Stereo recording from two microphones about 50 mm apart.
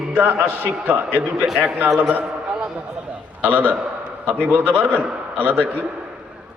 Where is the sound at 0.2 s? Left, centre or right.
Right.